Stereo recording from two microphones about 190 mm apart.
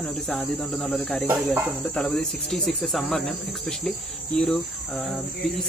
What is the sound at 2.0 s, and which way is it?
Speech, centre (ahead or behind).